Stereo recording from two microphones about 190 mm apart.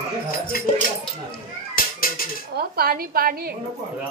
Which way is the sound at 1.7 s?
50° left (ahead or behind).